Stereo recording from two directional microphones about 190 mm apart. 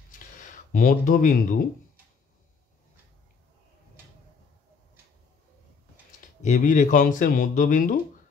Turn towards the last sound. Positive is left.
turn(degrees=45)  # may be behind; listen again after turning